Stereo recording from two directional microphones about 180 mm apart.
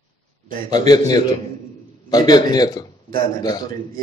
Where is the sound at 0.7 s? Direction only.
20° left (ahead or behind).